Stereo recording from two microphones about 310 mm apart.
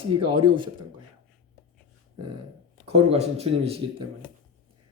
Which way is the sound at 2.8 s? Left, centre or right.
Centre.